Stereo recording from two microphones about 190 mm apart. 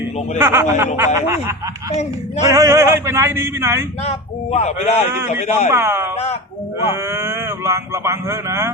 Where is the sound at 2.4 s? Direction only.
15° right (ahead or behind).